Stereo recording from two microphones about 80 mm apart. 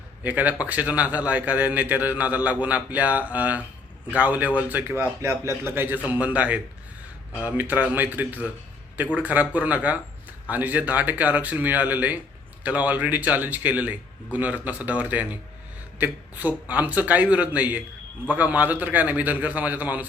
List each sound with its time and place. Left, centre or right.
0.2 s a man's voice: centre
4.8 s a man's voice: right